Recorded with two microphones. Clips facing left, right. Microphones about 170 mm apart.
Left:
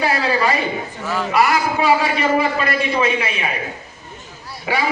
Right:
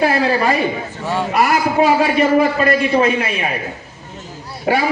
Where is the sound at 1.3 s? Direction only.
50° right (ahead or behind).